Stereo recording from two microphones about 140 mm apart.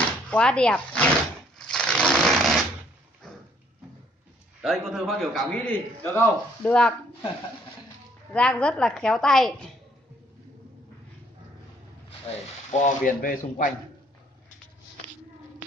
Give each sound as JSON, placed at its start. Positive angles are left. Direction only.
{"t": 0.3, "sound": "speech", "side_deg": 5}
{"t": 1.6, "sound": "a sound", "side_deg": 5}
{"t": 4.6, "sound": "a man's voice", "side_deg": 0}
{"t": 8.3, "sound": "a man's voice", "side_deg": 10}
{"t": 12.4, "sound": "speech", "side_deg": 60}